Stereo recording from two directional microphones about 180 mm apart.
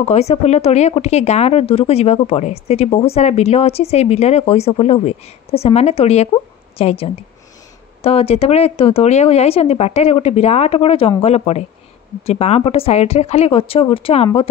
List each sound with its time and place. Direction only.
0.0 s speech: 35° left (ahead or behind)